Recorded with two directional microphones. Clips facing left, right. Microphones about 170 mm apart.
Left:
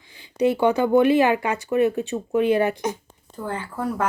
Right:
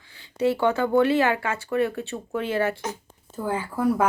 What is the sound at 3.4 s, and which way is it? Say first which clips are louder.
Speech: right 4 dB; 10° right (ahead or behind).